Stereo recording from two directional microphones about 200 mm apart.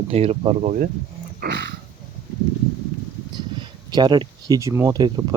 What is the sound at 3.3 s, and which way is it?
Speech, 20° right (ahead or behind).